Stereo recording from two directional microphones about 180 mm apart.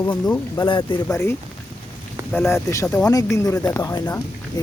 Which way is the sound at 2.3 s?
15° left (ahead or behind).